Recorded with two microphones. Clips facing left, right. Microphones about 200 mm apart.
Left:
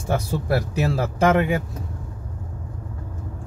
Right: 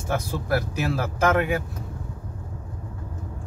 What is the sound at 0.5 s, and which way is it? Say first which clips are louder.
Speech: left 2 dB; 30° left (ahead or behind).